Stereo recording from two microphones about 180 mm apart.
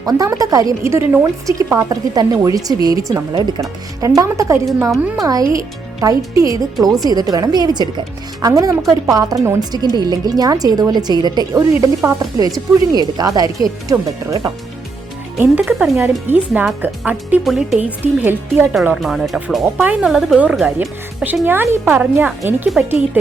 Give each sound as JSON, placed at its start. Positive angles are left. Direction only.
{"t": 0.0, "sound": "a woman's voice", "side_deg": -20}
{"t": 4.9, "sound": "speech", "side_deg": -5}
{"t": 5.5, "sound": "a woman's voice", "side_deg": -20}
{"t": 15.4, "sound": "speech", "side_deg": -5}